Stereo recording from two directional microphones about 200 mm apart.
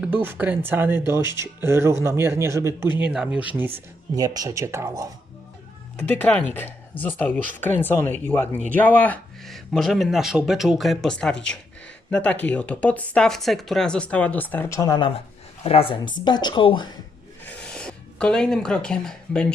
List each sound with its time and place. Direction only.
0.0 s speech: 10° right (ahead or behind)
6.0 s speech: 5° left (ahead or behind)
17.4 s a sound: 5° left (ahead or behind)